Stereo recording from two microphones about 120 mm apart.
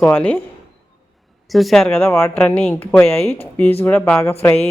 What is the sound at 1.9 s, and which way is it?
Speech, 20° left (ahead or behind).